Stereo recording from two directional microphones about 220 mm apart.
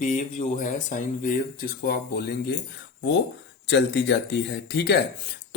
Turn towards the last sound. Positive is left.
turn(degrees=50)  # may be behind; listen again after turning